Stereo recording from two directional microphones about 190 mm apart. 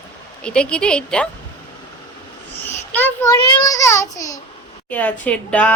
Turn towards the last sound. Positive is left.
turn(degrees=5)  # may be behind; listen again after turning